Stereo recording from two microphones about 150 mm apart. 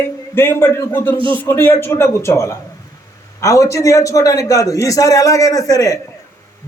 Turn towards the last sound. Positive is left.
turn(degrees=25)  # may be behind; listen again after turning